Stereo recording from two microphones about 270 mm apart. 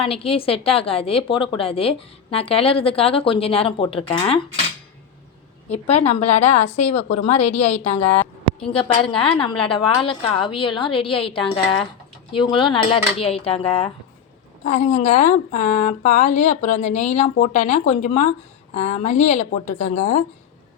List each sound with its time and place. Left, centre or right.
0.0 s a woman's voice: left
5.6 s a woman's voice: left